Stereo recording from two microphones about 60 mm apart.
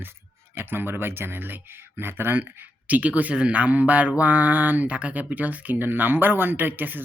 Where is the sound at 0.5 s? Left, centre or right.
Right.